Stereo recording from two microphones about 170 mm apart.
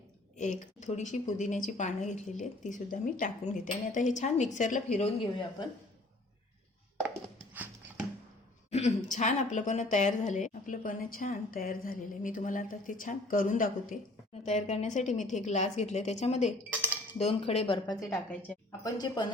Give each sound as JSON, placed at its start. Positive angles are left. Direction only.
{"t": 0.3, "sound": "a woman's voice", "side_deg": 45}
{"t": 7.1, "sound": "a sound", "side_deg": -10}
{"t": 8.7, "sound": "a woman's voice", "side_deg": 45}
{"t": 14.4, "sound": "a woman's voice", "side_deg": 40}
{"t": 17.8, "sound": "a woman's voice", "side_deg": 20}